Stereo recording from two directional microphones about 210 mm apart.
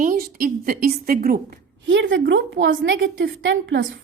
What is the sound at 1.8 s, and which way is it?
Speech, 60° right (ahead or behind).